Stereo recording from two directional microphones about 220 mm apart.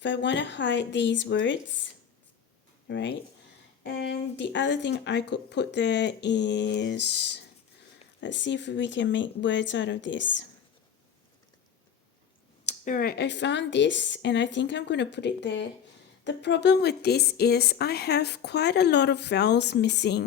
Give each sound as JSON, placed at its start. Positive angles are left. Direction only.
{"t": 0.0, "sound": "a woman's voice", "side_deg": 55}
{"t": 12.6, "sound": "a woman's voice", "side_deg": 35}